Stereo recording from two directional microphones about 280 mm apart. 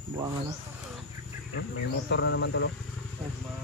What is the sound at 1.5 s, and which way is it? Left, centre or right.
Speech, left.